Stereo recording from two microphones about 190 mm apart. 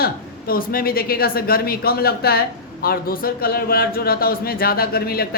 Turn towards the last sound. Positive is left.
turn(degrees=55)  # may be behind; listen again after turning